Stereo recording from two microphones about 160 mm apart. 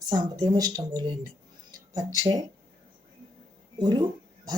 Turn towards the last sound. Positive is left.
turn(degrees=-25)  # may be behind; listen again after turning